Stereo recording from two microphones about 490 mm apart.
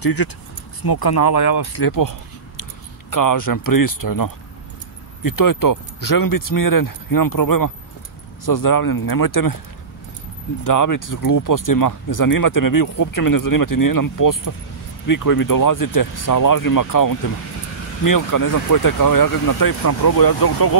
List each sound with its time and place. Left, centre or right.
0.0 s speech: left
10.6 s speech: left